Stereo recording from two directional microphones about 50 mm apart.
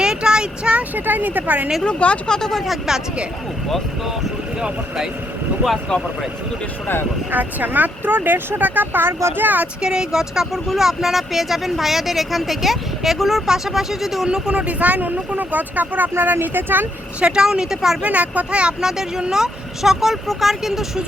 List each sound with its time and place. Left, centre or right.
0.0 s a sound: centre
0.9 s speech: right
1.8 s speech: left
2.3 s speech: centre
5.9 s speech: centre
7.3 s speech: right
9.8 s speech: centre
14.3 s speech: centre
14.5 s speech: right
17.2 s speech: centre
18.0 s speech: right
18.8 s speech: centre